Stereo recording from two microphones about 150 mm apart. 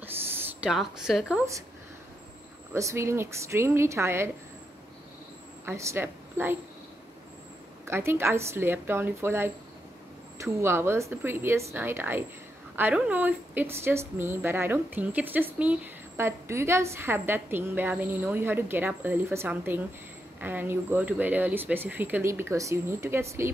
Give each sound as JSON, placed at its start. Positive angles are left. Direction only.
{"t": 0.0, "sound": "a sound", "side_deg": -15}
{"t": 0.7, "sound": "a woman's voice", "side_deg": 0}
{"t": 2.7, "sound": "a woman's voice", "side_deg": -20}
{"t": 5.7, "sound": "a woman's voice", "side_deg": -15}
{"t": 7.8, "sound": "a woman's voice", "side_deg": -15}